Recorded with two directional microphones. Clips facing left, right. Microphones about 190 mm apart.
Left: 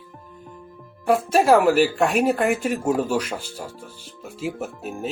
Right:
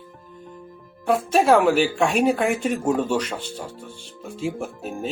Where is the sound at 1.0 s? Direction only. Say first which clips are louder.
Left 1 dB; 5° left (ahead or behind).